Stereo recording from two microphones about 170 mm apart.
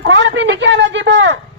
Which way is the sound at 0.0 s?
90° right.